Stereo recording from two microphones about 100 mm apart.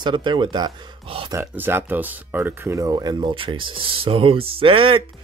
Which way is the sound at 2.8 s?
40° right (ahead or behind).